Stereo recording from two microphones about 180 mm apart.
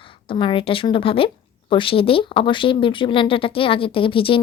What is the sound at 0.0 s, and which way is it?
Speech, 30° left (ahead or behind).